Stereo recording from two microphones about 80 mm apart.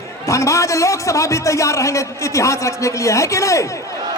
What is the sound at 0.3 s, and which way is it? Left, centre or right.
A man's voice, left.